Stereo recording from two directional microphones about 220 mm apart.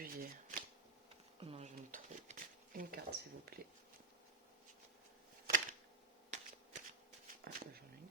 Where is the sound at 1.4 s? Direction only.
30° right (ahead or behind).